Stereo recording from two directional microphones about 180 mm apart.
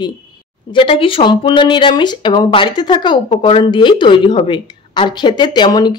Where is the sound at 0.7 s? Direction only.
30° left (ahead or behind).